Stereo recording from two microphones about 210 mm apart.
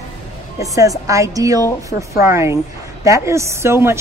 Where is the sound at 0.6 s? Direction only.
15° right (ahead or behind).